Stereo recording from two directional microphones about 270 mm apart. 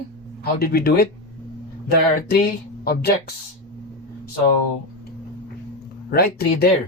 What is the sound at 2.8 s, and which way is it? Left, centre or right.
Speech, left.